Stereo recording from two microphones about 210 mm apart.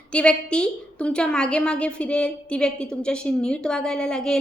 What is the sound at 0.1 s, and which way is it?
A woman's voice, 5° left (ahead or behind).